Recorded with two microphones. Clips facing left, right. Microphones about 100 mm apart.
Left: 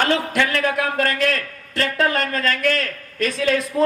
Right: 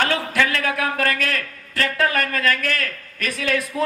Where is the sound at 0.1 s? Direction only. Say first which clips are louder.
Left 2 dB; 20° left (ahead or behind).